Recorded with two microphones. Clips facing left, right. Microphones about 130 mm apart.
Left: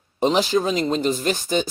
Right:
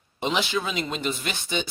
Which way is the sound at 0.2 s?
40° left (ahead or behind).